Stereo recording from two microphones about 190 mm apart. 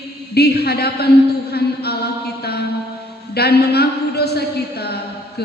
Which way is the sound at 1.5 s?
60° left (ahead or behind).